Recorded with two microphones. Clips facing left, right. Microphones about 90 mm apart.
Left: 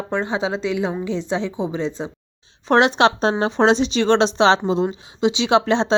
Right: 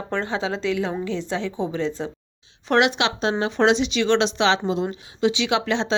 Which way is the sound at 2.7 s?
35° left (ahead or behind).